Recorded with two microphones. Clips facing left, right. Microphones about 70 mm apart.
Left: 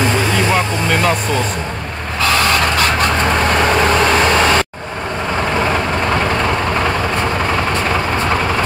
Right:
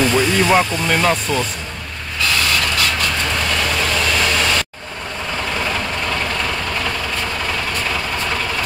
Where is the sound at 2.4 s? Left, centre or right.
Left.